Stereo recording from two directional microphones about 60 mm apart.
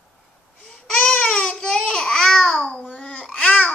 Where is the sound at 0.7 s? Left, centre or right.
Centre.